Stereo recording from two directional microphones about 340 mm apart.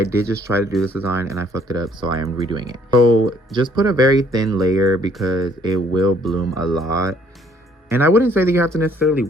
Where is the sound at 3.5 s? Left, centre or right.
Centre.